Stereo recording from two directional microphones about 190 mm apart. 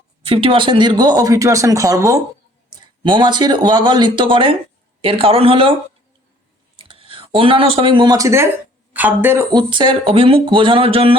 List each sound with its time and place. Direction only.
0.2 s speech: 30° right (ahead or behind)
6.8 s speech: 30° right (ahead or behind)